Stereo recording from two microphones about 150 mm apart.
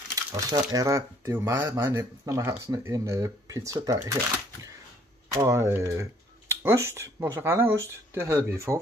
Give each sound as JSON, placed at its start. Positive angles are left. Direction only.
{"t": 0.3, "sound": "speech", "side_deg": -20}
{"t": 5.3, "sound": "speech", "side_deg": -20}